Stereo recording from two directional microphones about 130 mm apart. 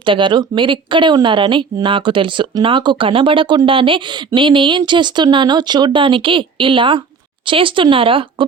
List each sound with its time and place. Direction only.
0.0 s speech: 40° right (ahead or behind)